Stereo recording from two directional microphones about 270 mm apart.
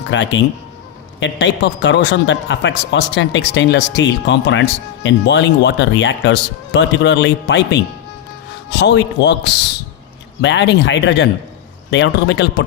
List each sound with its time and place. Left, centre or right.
0.1 s a man's voice: left